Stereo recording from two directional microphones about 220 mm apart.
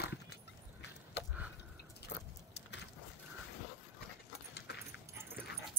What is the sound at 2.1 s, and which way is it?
Vehicle, 50° left (ahead or behind).